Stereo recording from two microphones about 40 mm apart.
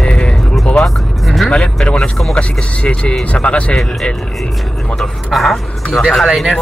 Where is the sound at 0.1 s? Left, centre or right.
Left.